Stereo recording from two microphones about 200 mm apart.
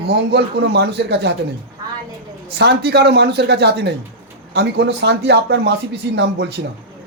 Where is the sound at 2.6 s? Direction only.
55° right (ahead or behind).